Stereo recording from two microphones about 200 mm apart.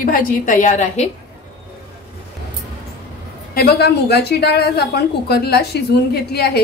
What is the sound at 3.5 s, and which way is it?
A woman's voice, 55° left (ahead or behind).